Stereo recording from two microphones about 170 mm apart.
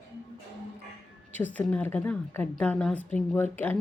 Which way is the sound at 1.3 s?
10° left (ahead or behind).